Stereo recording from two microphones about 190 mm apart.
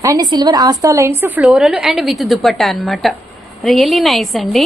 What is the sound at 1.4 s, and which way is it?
Speech, 5° right (ahead or behind).